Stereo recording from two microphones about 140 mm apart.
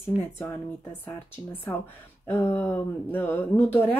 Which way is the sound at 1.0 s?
15° left (ahead or behind).